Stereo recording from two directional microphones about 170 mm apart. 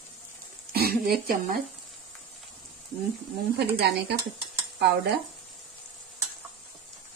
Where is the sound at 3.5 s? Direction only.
70° right (ahead or behind).